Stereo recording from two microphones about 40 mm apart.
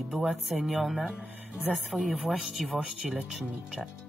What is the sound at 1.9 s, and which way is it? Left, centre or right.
Speech, centre.